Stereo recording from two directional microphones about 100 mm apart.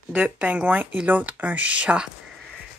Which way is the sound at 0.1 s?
10° right (ahead or behind).